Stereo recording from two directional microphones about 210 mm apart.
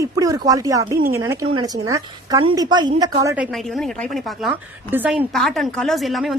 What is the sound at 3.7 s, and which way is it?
A woman's voice, centre (ahead or behind).